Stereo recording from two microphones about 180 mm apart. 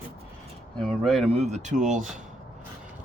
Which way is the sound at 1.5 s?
40° right (ahead or behind).